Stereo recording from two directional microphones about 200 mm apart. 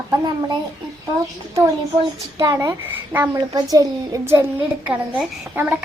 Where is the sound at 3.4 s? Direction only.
20° right (ahead or behind).